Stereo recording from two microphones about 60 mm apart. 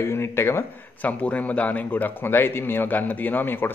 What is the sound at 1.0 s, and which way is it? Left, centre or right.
Speech, left.